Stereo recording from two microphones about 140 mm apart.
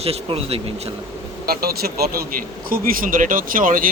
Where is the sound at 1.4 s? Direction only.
90° right.